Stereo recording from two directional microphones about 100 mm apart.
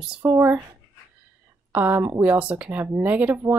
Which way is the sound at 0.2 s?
20° right (ahead or behind).